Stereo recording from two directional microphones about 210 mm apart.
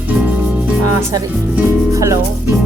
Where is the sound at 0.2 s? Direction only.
5° right (ahead or behind).